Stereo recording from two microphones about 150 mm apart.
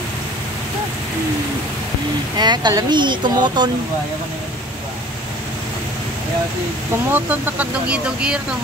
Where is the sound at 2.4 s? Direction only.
30° right (ahead or behind).